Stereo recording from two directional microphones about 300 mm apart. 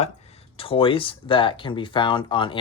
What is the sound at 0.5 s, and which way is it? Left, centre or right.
Speech, centre.